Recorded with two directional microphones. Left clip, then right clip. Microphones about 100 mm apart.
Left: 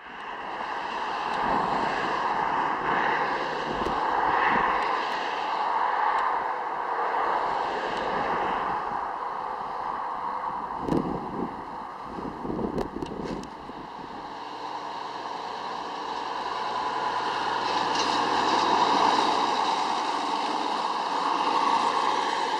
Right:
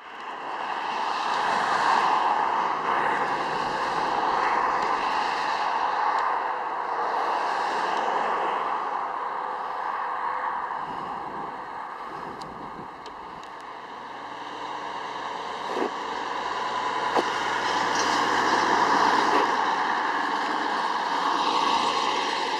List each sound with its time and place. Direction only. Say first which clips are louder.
0.8 s vehicle: right 4 dB; 40° right (ahead or behind)
6.0 s vehicle: right 1 dB; 5° right (ahead or behind)
7.1 s vehicle: even; 35° right (ahead or behind)
16.3 s vehicle: right 1 dB; 5° right (ahead or behind)
19.4 s vehicle: right 1 dB; 10° left (ahead or behind)
20.7 s vehicle: right 2 dB; 10° right (ahead or behind)